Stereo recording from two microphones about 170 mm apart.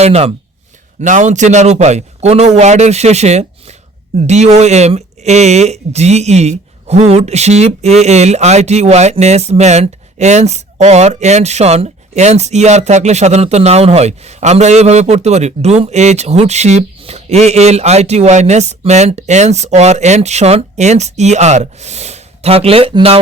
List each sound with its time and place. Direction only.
0.0 s speech: 40° right (ahead or behind)